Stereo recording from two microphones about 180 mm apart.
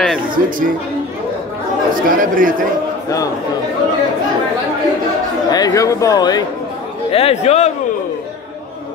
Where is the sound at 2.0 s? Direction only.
50° right (ahead or behind).